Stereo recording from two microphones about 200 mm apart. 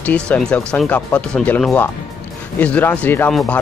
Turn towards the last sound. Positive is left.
turn(degrees=10)  # may be behind; listen again after turning